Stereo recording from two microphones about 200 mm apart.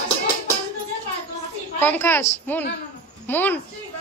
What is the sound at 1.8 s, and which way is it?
A man's voice, 10° left (ahead or behind).